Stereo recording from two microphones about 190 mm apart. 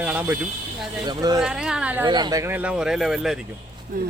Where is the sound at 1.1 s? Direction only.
20° right (ahead or behind).